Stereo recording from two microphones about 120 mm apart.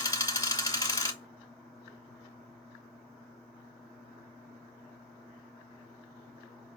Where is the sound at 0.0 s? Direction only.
30° left (ahead or behind).